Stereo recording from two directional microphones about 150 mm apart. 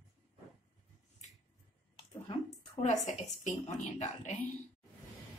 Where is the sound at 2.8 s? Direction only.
55° left (ahead or behind).